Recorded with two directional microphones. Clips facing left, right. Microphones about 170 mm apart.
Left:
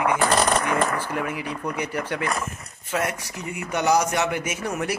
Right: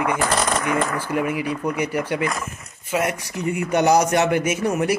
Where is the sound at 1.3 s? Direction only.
10° right (ahead or behind).